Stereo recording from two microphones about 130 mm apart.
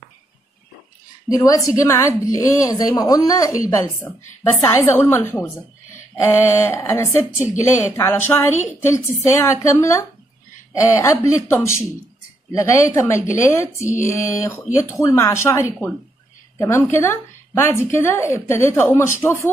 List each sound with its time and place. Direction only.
1.3 s a woman's voice: 25° left (ahead or behind)